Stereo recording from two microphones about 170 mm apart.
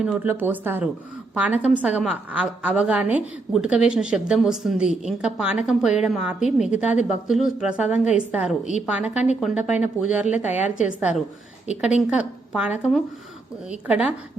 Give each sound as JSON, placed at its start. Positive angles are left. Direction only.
{"t": 0.0, "sound": "a woman's voice", "side_deg": -5}
{"t": 10.2, "sound": "a woman's voice", "side_deg": 45}
{"t": 10.5, "sound": "speech", "side_deg": -10}